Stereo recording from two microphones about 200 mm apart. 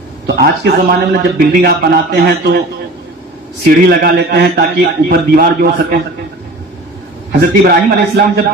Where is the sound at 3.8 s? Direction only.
55° right (ahead or behind).